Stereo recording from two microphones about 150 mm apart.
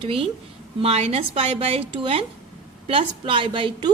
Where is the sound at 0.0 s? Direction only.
35° right (ahead or behind).